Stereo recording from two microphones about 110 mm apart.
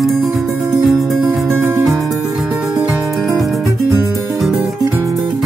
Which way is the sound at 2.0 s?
Centre (ahead or behind).